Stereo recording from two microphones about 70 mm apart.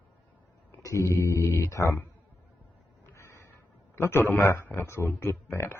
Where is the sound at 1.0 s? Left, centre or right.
Left.